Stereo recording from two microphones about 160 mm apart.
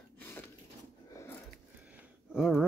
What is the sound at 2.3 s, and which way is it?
Speech, 5° right (ahead or behind).